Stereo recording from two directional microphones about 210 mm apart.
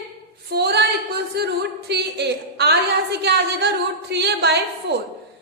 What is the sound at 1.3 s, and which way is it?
A woman's voice, 50° right (ahead or behind).